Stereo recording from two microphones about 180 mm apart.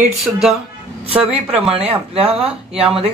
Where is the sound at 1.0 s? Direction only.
35° right (ahead or behind).